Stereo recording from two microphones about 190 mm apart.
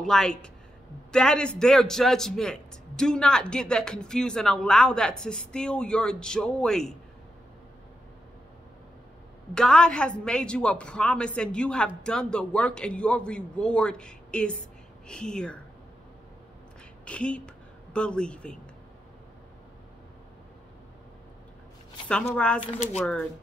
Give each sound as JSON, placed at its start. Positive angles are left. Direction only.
{"t": 0.0, "sound": "a man's voice", "side_deg": 5}
{"t": 9.5, "sound": "a man's voice", "side_deg": 5}
{"t": 17.0, "sound": "a man's voice", "side_deg": 5}
{"t": 22.0, "sound": "a man's voice", "side_deg": 5}